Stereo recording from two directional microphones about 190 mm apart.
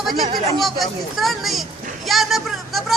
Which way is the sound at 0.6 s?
Centre (ahead or behind).